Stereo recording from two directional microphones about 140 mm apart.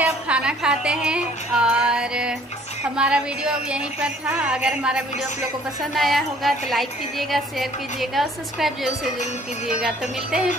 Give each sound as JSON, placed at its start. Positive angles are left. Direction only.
{"t": 0.0, "sound": "a woman's voice", "side_deg": -5}